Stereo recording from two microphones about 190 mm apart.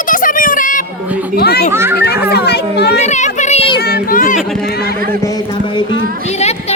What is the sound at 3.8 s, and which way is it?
Speech, 50° left (ahead or behind).